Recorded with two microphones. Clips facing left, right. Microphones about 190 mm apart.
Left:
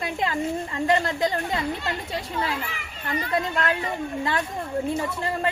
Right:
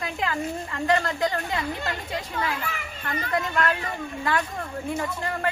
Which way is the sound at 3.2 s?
25° left (ahead or behind).